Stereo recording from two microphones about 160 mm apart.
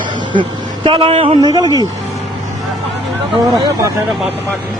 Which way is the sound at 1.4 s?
25° right (ahead or behind).